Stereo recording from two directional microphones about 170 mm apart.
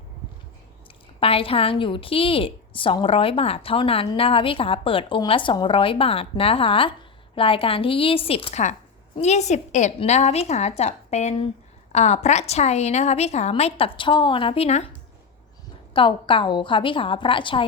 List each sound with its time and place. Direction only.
1.2 s a woman's voice: 35° left (ahead or behind)
15.9 s a woman's voice: 30° left (ahead or behind)